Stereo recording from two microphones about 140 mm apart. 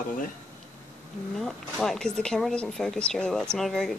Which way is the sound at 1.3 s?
5° left (ahead or behind).